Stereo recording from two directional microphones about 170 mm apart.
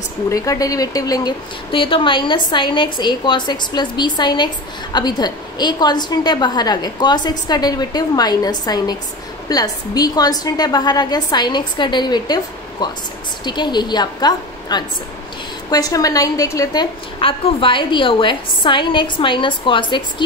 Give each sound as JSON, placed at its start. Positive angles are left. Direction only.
{"t": 0.3, "sound": "a woman's voice", "side_deg": 20}
{"t": 13.5, "sound": "a woman's voice", "side_deg": 25}
{"t": 17.2, "sound": "a woman's voice", "side_deg": 30}